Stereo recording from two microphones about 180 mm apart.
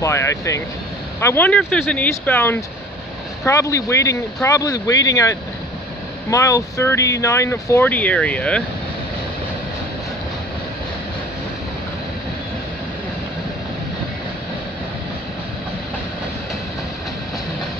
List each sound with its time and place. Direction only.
0.0 s speech: 15° left (ahead or behind)